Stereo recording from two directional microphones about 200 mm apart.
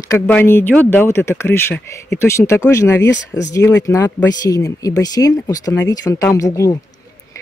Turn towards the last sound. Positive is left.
turn(degrees=15)  # may be behind; listen again after turning